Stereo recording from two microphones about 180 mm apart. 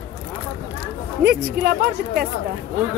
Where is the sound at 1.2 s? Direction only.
65° right (ahead or behind).